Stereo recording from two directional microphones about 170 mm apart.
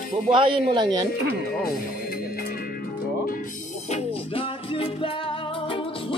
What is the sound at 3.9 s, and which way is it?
Music, 30° left (ahead or behind).